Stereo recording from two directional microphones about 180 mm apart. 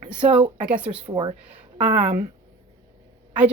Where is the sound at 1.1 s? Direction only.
30° right (ahead or behind).